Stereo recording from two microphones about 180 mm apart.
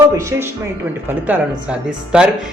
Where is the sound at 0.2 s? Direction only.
15° right (ahead or behind).